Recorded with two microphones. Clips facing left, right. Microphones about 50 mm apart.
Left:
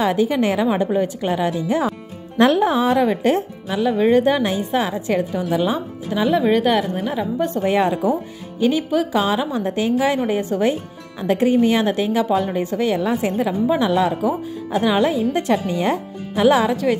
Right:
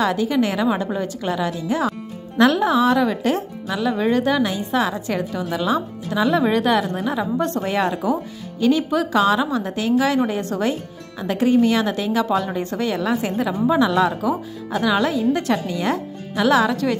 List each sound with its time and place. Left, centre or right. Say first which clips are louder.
0.0 s speech: left 1 dB; left
6.0 s speech: left 2 dB; centre
7.6 s speech: left 3 dB; left